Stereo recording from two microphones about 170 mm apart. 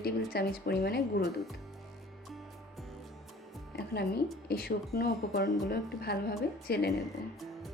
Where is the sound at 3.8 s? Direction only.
70° left (ahead or behind).